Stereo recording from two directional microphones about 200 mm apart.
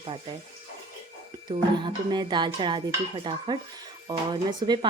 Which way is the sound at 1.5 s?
20° right (ahead or behind).